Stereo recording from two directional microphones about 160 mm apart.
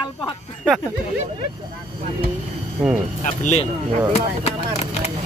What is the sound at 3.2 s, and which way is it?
Speech, 45° left (ahead or behind).